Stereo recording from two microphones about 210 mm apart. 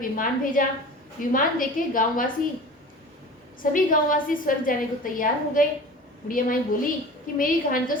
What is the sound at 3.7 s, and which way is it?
A woman's voice, 40° left (ahead or behind).